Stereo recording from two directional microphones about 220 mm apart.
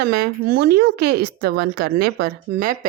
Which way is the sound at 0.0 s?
45° right (ahead or behind).